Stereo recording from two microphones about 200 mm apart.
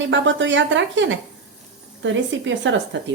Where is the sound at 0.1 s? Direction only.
65° right (ahead or behind).